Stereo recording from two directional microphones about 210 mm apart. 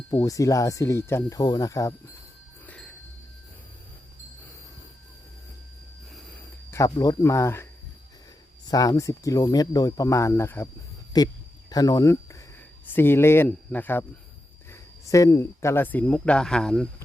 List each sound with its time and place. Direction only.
0.1 s speech: 15° left (ahead or behind)
2.6 s bicycle bell: 5° left (ahead or behind)
6.1 s a sound: 10° left (ahead or behind)
8.6 s speech: 15° left (ahead or behind)